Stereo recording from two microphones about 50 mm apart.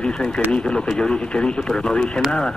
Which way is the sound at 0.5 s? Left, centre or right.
Centre.